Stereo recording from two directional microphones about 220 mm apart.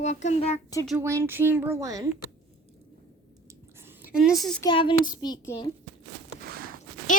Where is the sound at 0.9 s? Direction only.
10° right (ahead or behind).